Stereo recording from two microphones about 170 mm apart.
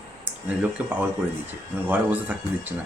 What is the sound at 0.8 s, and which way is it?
Speech, 10° right (ahead or behind).